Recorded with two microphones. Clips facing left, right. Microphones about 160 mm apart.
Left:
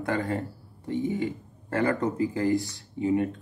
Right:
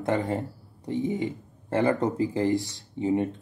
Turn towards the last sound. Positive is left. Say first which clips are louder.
# even
turn(degrees=-20)  # may be behind; listen again after turning